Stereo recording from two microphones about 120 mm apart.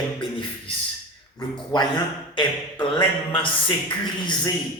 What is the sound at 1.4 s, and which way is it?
Speech, 35° left (ahead or behind).